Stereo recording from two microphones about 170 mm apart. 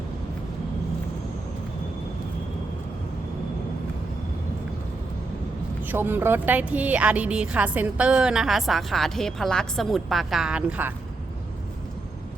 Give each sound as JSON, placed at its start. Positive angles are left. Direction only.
{"t": 5.8, "sound": "speech", "side_deg": -10}